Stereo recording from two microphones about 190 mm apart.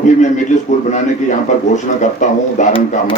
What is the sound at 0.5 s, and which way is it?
Speech, 40° left (ahead or behind).